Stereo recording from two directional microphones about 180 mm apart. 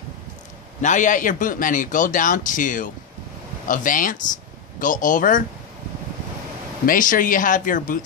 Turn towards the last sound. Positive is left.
turn(degrees=50)  # may be behind; listen again after turning